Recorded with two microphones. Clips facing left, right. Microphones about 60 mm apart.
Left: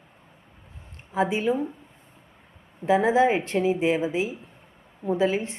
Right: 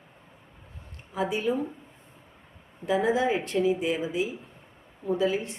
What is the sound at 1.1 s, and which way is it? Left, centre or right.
Speech, left.